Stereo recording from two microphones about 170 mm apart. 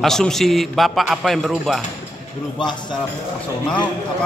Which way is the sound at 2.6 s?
25° left (ahead or behind).